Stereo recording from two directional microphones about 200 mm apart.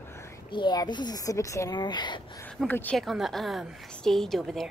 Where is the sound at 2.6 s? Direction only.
10° left (ahead or behind).